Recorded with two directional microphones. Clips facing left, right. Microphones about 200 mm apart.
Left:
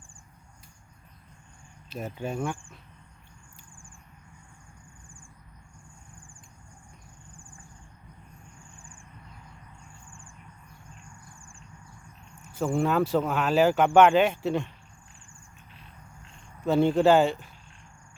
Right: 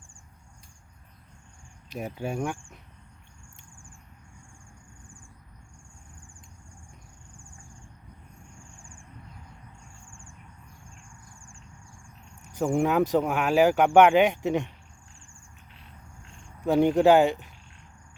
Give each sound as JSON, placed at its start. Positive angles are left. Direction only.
{"t": 1.9, "sound": "speech", "side_deg": -10}
{"t": 12.4, "sound": "speech", "side_deg": -15}
{"t": 16.6, "sound": "speech", "side_deg": -15}